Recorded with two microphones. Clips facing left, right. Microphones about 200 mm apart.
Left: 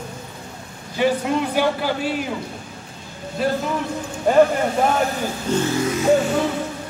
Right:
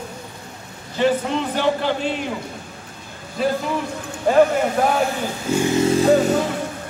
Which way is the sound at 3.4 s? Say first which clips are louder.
Right 1 dB; centre (ahead or behind).